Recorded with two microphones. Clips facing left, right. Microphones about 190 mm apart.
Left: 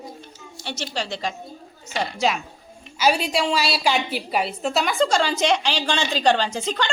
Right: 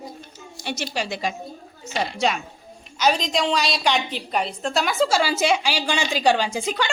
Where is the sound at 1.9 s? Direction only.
Centre (ahead or behind).